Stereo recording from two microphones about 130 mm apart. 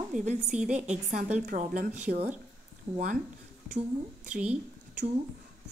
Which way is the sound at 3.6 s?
75° right (ahead or behind).